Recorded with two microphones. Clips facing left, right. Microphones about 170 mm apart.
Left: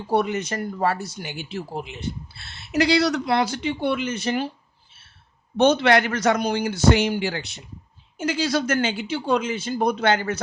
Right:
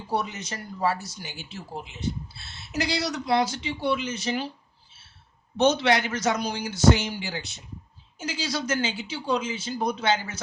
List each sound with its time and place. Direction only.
0.1 s speech: 60° left (ahead or behind)